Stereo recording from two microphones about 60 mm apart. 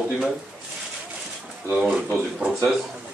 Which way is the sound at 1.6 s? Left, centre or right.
Centre.